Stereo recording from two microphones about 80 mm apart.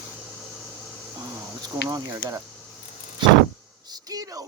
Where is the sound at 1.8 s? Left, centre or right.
Right.